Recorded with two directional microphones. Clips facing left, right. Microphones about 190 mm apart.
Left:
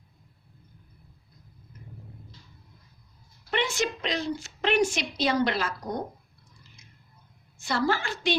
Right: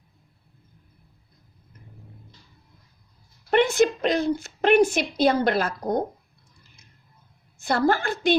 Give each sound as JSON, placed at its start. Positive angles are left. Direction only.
{"t": 3.5, "sound": "a woman's voice", "side_deg": -55}
{"t": 7.6, "sound": "a woman's voice", "side_deg": -55}